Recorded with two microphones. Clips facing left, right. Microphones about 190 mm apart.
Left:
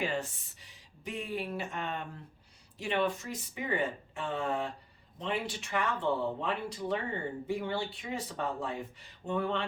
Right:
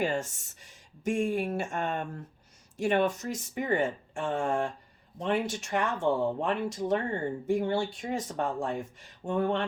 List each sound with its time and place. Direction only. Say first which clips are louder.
0.0 s speech: right 4 dB; 45° right (ahead or behind)